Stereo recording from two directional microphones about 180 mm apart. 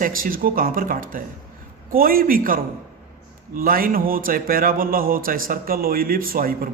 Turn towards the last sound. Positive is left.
turn(degrees=-55)  # may be behind; listen again after turning